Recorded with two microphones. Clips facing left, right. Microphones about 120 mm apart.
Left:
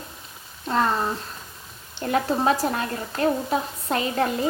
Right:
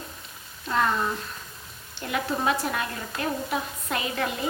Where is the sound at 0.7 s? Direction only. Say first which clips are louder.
Left 2 dB; 35° left (ahead or behind).